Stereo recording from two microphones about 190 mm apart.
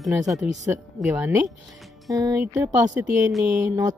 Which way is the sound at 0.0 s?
Centre (ahead or behind).